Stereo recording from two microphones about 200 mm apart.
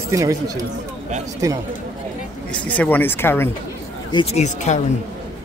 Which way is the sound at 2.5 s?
5° left (ahead or behind).